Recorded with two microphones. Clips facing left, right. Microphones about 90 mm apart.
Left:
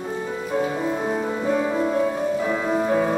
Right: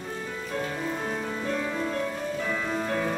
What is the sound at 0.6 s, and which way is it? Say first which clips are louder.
Music: left 7 dB; 15° left (ahead or behind).